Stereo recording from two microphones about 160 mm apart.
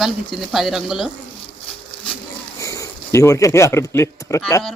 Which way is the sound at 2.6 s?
20° left (ahead or behind).